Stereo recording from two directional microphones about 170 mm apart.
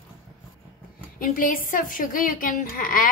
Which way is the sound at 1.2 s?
55° left (ahead or behind).